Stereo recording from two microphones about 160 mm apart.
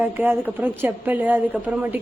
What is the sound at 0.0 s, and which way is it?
A woman's voice, 10° right (ahead or behind).